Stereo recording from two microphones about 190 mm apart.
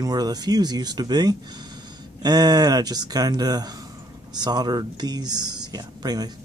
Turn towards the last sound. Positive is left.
turn(degrees=-20)  # may be behind; listen again after turning